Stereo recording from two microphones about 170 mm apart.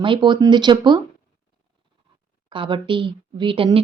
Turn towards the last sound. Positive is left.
turn(degrees=-30)  # may be behind; listen again after turning